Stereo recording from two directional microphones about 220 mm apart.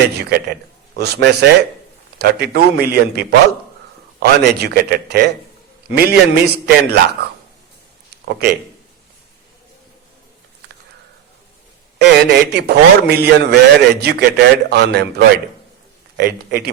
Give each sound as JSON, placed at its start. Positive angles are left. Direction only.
{"t": 0.2, "sound": "a man's voice", "side_deg": -45}
{"t": 8.1, "sound": "a sound", "side_deg": -50}
{"t": 11.9, "sound": "a man's voice", "side_deg": -50}